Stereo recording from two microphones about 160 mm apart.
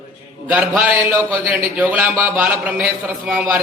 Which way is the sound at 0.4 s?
10° right (ahead or behind).